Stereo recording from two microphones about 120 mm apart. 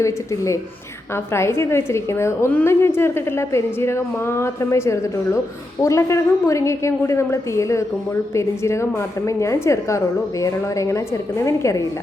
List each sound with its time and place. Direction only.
0.0 s a woman's voice: 25° left (ahead or behind)